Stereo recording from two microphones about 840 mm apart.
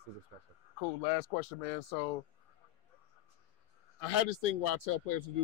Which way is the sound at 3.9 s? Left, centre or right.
Left.